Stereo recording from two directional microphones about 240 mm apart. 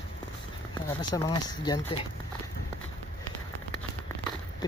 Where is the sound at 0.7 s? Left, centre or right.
Centre.